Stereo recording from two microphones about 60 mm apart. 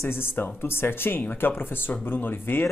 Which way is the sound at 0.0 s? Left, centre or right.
Left.